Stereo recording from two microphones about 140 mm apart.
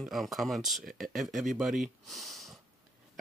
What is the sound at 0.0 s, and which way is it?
Speech, centre (ahead or behind).